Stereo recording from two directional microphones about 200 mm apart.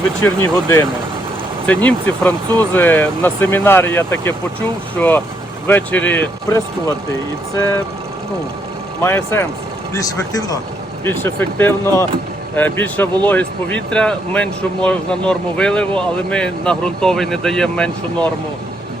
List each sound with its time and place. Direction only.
0.2 s speech: 15° left (ahead or behind)
9.0 s speech: 10° left (ahead or behind)